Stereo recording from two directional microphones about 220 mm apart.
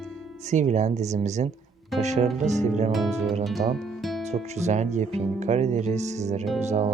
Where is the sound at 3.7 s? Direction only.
Centre (ahead or behind).